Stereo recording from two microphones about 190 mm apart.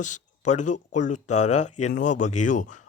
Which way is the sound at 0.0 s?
40° left (ahead or behind).